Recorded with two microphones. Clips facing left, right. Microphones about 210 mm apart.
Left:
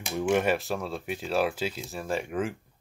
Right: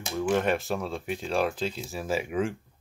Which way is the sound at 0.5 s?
Centre (ahead or behind).